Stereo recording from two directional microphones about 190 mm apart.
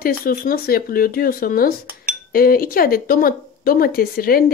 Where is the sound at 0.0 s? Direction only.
50° left (ahead or behind).